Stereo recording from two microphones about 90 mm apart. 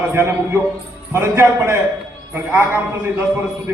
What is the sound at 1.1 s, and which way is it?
Speech, 30° right (ahead or behind).